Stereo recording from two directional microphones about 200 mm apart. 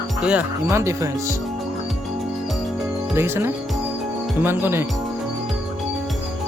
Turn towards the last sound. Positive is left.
turn(degrees=-10)  # may be behind; listen again after turning